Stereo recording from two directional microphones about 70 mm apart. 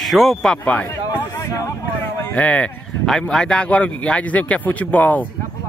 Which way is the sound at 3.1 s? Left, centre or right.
Centre.